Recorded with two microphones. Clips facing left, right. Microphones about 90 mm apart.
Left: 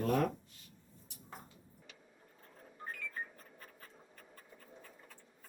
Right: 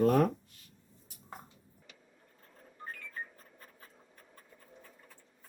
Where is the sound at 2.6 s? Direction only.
5° left (ahead or behind).